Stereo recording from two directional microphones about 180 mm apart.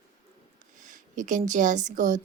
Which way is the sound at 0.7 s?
45° right (ahead or behind).